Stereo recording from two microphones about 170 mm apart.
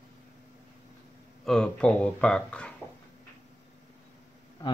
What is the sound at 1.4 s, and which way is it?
Speech, centre (ahead or behind).